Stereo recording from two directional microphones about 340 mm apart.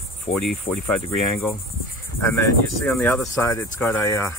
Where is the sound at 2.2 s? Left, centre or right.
Centre.